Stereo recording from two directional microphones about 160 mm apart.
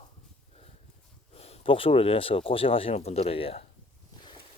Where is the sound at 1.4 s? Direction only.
35° left (ahead or behind).